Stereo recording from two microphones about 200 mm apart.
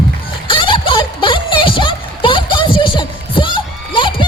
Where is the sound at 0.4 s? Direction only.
25° left (ahead or behind).